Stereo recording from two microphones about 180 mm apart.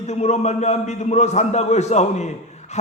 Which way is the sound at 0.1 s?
40° left (ahead or behind).